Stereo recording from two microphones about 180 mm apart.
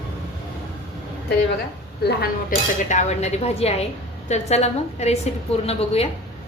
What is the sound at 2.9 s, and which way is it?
A woman's voice, 40° left (ahead or behind).